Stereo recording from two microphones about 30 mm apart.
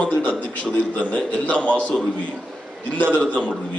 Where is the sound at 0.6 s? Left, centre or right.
Left.